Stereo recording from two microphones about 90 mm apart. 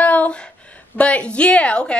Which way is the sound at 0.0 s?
15° left (ahead or behind).